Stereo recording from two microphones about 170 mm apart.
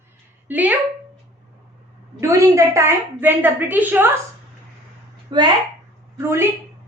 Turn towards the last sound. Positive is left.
turn(degrees=-15)  # may be behind; listen again after turning